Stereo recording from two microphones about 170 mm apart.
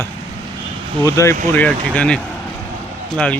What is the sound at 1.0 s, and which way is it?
Speech, 20° left (ahead or behind).